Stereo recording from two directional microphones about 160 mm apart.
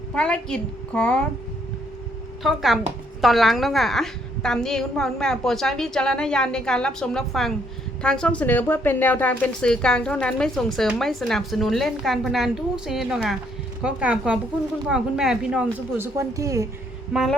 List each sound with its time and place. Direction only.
0.1 s speech: 5° left (ahead or behind)
2.4 s speech: centre (ahead or behind)
16.1 s speech: 20° right (ahead or behind)
17.1 s speech: centre (ahead or behind)